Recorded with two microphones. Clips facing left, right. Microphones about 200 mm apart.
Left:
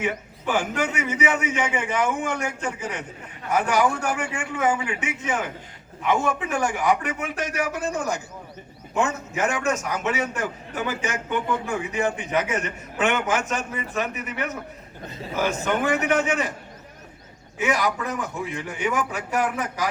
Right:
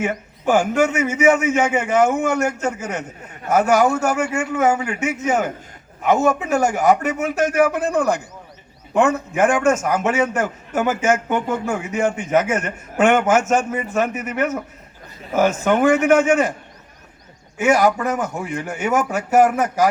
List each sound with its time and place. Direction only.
0.0 s a man's voice: 45° right (ahead or behind)
17.6 s a man's voice: 45° right (ahead or behind)